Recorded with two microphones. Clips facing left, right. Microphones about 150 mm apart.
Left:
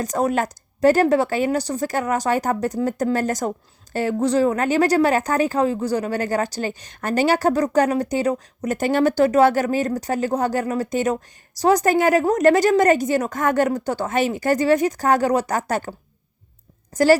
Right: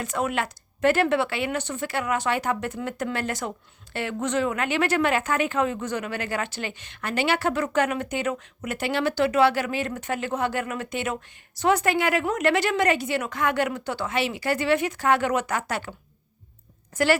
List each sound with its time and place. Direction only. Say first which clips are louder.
0.0 s a woman's voice: left 6 dB; 40° left (ahead or behind)